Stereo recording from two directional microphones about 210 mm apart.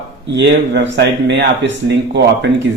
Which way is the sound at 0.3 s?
55° right (ahead or behind).